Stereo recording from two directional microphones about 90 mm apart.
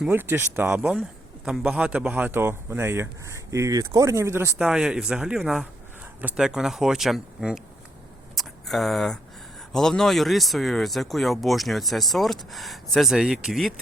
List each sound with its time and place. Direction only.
0.1 s speech: 25° right (ahead or behind)
1.5 s speech: 5° right (ahead or behind); by 4.5 s 25° right (ahead or behind)
4.5 s speech: 10° right (ahead or behind)
8.4 s a sound: centre (ahead or behind)
9.7 s speech: 5° left (ahead or behind)